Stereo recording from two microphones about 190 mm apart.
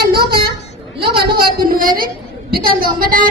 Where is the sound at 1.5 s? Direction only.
50° right (ahead or behind).